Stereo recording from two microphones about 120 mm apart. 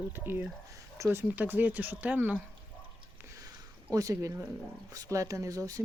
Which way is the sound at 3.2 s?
25° right (ahead or behind).